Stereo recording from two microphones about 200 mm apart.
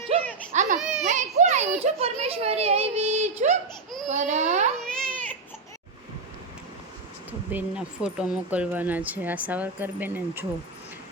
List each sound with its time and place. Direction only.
0.5 s baby cry: 35° right (ahead or behind)
0.8 s children playing: 5° right (ahead or behind)
1.0 s children playing: 35° right (ahead or behind)
4.1 s a child's voice: 35° right (ahead or behind)
4.9 s baby cry: 5° left (ahead or behind)
7.5 s speech: 5° right (ahead or behind)